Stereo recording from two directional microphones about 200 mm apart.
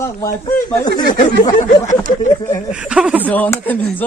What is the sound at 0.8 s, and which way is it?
Speech, 20° left (ahead or behind).